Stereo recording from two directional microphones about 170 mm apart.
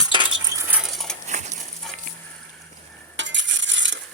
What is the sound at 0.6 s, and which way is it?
Cutlery, 10° right (ahead or behind).